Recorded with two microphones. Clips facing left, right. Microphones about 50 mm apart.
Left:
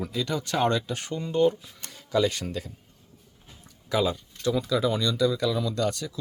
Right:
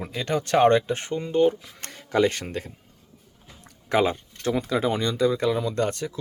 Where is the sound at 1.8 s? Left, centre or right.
Right.